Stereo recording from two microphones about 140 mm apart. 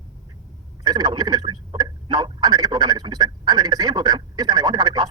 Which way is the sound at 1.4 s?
35° right (ahead or behind).